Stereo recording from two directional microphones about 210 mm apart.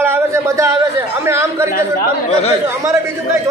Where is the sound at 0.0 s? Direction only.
10° right (ahead or behind).